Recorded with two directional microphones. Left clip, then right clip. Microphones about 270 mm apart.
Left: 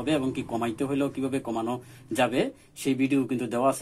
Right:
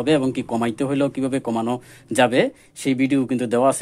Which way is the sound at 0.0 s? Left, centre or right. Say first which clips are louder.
Right 8 dB; right.